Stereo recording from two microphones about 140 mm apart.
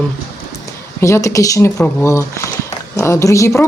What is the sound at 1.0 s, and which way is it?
Speech, 20° left (ahead or behind).